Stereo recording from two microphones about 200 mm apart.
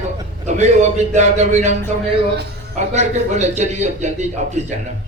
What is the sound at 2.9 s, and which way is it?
A man's voice, 35° right (ahead or behind).